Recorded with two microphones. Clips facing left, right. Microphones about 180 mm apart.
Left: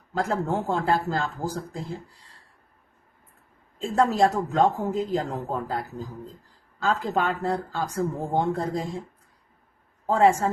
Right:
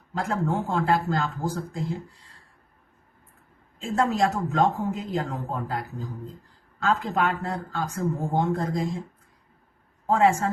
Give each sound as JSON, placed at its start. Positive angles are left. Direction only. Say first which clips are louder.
{"t": 0.1, "sound": "speech", "louder": "left 1 dB", "side_deg": 35}
{"t": 3.8, "sound": "speech", "louder": "left 2 dB", "side_deg": 35}
{"t": 6.8, "sound": "speech", "louder": "even", "side_deg": 35}
{"t": 10.1, "sound": "speech", "louder": "left 1 dB", "side_deg": 35}